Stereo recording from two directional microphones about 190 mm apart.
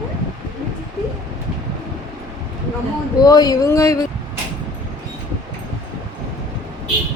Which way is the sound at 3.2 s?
20° left (ahead or behind).